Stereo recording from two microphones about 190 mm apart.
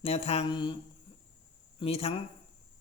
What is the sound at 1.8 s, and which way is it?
Speech, 30° left (ahead or behind).